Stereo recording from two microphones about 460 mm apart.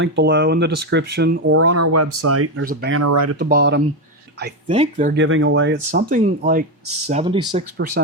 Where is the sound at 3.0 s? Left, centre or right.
Right.